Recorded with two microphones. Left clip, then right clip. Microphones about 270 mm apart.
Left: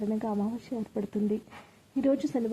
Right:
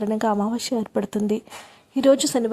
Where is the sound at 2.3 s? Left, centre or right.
Right.